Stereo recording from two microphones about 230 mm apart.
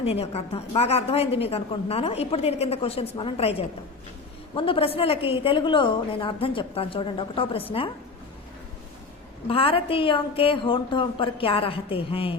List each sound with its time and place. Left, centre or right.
0.0 s a woman's voice: left
9.5 s a woman's voice: left